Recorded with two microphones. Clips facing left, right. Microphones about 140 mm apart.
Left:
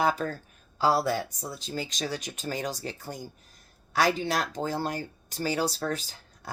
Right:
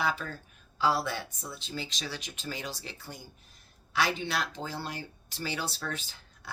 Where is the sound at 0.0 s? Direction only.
45° left (ahead or behind).